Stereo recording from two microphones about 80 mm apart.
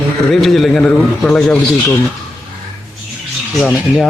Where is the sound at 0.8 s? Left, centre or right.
Centre.